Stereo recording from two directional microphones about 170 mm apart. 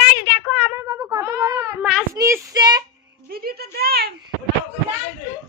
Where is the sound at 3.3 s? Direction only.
65° right (ahead or behind).